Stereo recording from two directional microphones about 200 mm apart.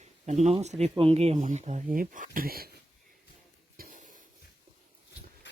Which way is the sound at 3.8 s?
40° right (ahead or behind).